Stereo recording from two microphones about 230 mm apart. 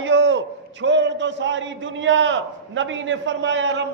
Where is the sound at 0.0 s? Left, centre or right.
Right.